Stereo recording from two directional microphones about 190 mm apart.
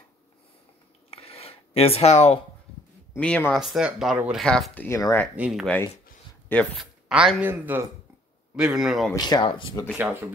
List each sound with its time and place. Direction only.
1.1 s a sound: 30° left (ahead or behind)
3.2 s speech: 5° left (ahead or behind)
4.8 s speech: 15° left (ahead or behind)
5.3 s speech: 5° right (ahead or behind)
7.1 s speech: 5° right (ahead or behind)
9.1 s speech: 20° left (ahead or behind)
9.9 s speech: 10° right (ahead or behind)